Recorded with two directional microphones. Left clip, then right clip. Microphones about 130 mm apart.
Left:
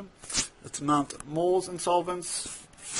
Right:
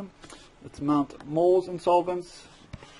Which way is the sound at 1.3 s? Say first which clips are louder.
Right 4 dB; centre (ahead or behind).